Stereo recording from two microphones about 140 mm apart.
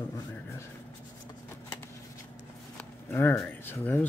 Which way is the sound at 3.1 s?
20° left (ahead or behind).